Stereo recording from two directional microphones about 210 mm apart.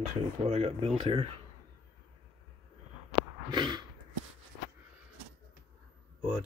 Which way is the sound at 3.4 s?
20° right (ahead or behind).